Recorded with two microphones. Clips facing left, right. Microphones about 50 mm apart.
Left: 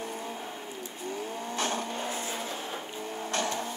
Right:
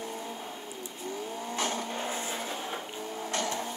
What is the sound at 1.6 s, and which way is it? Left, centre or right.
Vehicle, left.